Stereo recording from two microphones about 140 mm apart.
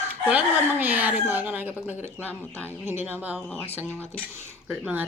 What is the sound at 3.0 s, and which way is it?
Speech, 15° right (ahead or behind).